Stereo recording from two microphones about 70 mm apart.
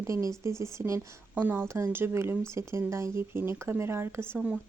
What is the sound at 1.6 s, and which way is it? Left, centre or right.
Speech, right.